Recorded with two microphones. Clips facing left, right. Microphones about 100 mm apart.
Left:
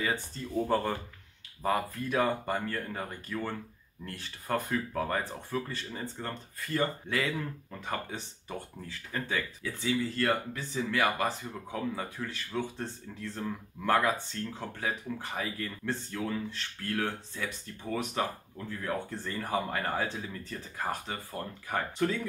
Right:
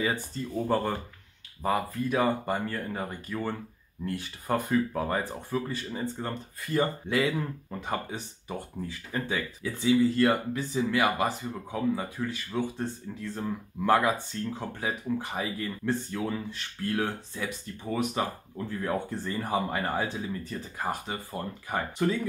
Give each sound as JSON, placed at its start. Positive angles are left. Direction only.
{"t": 0.0, "sound": "speech", "side_deg": -5}
{"t": 18.6, "sound": "speech", "side_deg": -20}